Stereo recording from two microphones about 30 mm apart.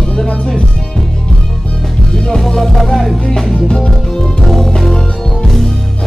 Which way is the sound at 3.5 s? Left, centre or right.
Centre.